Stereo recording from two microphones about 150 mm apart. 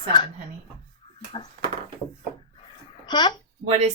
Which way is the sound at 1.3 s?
35° left (ahead or behind).